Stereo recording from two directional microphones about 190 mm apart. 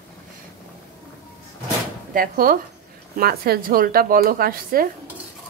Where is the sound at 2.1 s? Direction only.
50° right (ahead or behind).